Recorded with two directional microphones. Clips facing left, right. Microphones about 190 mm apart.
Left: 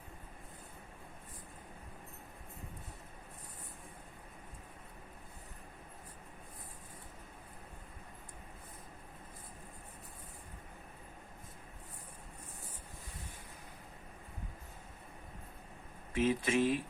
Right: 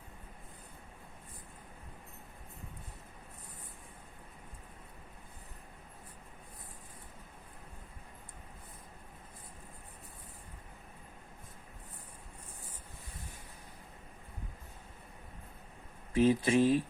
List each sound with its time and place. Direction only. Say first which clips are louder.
16.1 s speech: right 5 dB; 35° right (ahead or behind)